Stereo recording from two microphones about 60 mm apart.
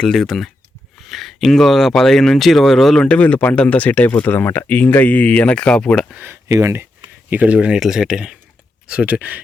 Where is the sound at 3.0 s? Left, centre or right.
Centre.